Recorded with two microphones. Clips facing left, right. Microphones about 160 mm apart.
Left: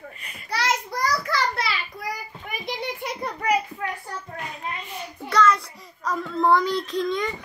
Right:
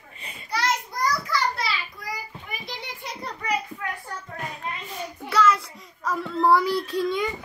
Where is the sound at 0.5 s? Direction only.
90° left.